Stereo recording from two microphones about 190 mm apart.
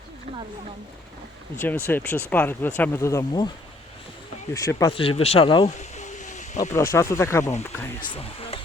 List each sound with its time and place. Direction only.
1.6 s speech: 10° left (ahead or behind)
4.5 s speech: 20° left (ahead or behind)
4.9 s speech: 30° left (ahead or behind)
5.7 s a sound: 40° left (ahead or behind)
6.9 s speech: 15° left (ahead or behind)
8.1 s speech: 30° left (ahead or behind)